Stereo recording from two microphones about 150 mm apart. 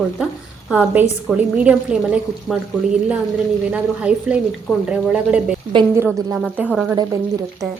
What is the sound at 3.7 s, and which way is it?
A woman's voice, 10° right (ahead or behind).